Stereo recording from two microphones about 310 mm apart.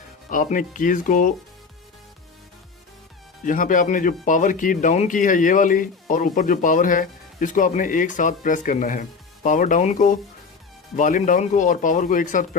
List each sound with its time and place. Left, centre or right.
0.3 s speech: left
3.4 s speech: left